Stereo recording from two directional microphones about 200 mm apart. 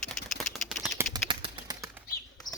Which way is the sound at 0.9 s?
20° right (ahead or behind).